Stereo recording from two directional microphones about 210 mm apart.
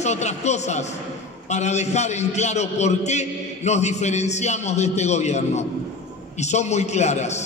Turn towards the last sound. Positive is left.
turn(degrees=30)  # may be behind; listen again after turning